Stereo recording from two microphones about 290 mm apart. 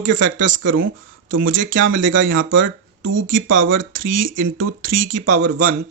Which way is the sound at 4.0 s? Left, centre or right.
Right.